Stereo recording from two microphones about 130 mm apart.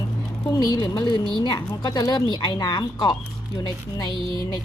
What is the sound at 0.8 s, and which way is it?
Speech, 35° left (ahead or behind).